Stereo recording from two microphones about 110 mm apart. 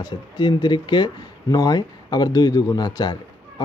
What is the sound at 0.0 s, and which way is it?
Speech, 40° left (ahead or behind).